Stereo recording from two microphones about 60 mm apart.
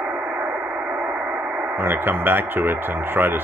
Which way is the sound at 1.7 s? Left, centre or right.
Right.